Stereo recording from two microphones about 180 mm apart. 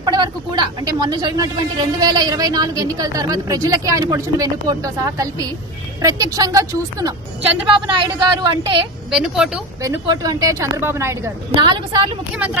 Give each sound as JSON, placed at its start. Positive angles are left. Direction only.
{"t": 0.0, "sound": "speech", "side_deg": -25}
{"t": 9.1, "sound": "a woman's voice", "side_deg": -5}
{"t": 9.8, "sound": "speech", "side_deg": -20}
{"t": 11.5, "sound": "speech", "side_deg": -25}